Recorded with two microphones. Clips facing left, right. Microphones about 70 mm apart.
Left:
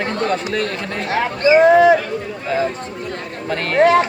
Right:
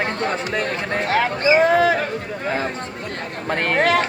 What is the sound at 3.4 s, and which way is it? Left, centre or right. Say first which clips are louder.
Speech: even; right.